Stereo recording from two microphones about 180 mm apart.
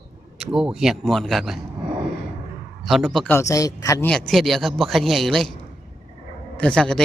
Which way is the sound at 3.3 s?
15° left (ahead or behind).